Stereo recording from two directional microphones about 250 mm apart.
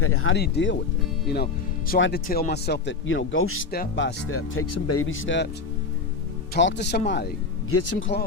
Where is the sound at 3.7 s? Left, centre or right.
Left.